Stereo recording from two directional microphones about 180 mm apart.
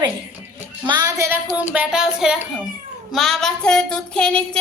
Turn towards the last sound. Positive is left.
turn(degrees=5)  # may be behind; listen again after turning